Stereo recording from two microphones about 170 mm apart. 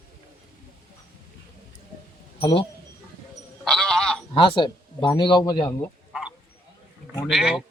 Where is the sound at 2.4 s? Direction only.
30° left (ahead or behind).